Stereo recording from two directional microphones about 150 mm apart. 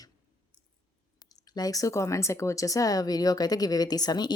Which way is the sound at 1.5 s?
25° left (ahead or behind).